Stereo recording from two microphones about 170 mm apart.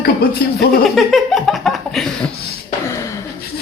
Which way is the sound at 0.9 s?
Centre (ahead or behind).